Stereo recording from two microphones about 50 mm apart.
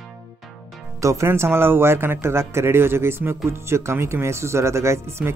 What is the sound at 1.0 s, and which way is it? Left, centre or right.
Speech, right.